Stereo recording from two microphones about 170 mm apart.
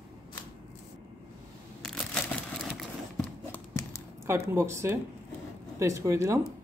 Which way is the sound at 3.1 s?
15° left (ahead or behind).